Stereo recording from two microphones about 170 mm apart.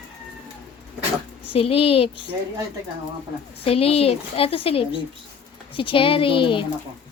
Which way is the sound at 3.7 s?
35° left (ahead or behind).